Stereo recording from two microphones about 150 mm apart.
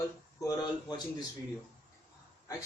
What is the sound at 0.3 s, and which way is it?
Speech, 25° left (ahead or behind).